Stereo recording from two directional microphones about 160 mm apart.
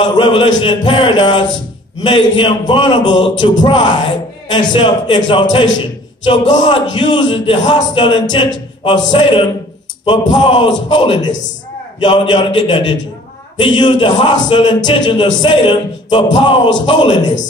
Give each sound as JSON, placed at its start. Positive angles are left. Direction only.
{"t": 0.0, "sound": "a man's voice", "side_deg": 30}